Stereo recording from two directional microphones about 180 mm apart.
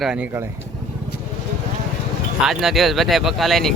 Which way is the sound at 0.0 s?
5° right (ahead or behind).